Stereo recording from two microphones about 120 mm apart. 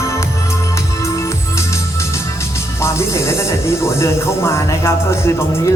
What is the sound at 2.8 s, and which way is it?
Music, 25° left (ahead or behind).